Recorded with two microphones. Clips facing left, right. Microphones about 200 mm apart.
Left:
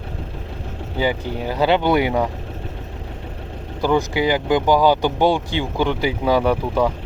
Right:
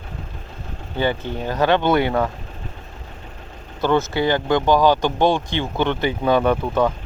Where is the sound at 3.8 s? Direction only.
15° left (ahead or behind).